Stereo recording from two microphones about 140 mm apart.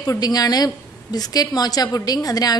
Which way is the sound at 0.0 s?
25° left (ahead or behind).